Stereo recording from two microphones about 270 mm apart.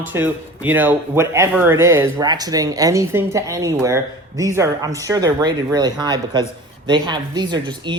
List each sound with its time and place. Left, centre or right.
0.0 s speech: centre